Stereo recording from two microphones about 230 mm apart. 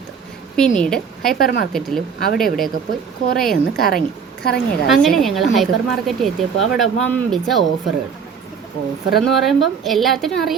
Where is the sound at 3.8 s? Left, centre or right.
Left.